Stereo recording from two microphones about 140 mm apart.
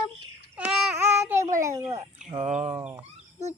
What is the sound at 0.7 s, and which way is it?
Child singing, 5° right (ahead or behind).